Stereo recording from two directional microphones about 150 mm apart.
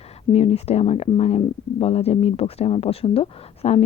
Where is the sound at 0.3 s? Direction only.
40° left (ahead or behind).